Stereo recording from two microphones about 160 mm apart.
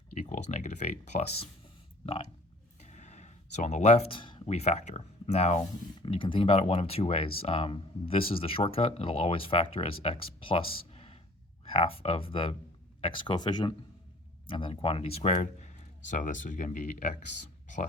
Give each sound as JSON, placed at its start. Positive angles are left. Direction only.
{"t": 0.1, "sound": "speech", "side_deg": 45}
{"t": 10.9, "sound": "a sound", "side_deg": 35}
{"t": 11.6, "sound": "speech", "side_deg": 35}